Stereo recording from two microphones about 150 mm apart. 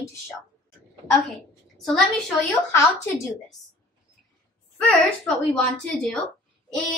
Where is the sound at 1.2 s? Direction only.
Centre (ahead or behind).